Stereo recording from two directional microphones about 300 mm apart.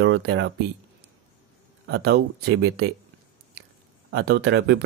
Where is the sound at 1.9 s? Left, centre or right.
Right.